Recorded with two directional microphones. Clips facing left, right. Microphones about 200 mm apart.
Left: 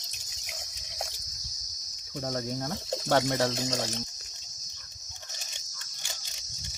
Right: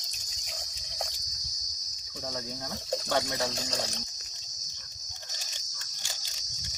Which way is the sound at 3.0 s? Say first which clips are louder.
Left 6 dB; 65° left (ahead or behind).